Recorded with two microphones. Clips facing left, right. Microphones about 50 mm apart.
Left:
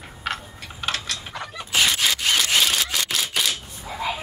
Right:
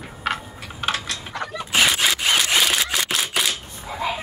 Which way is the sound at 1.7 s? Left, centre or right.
Right.